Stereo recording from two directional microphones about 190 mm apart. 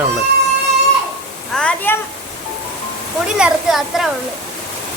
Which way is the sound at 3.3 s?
5° right (ahead or behind).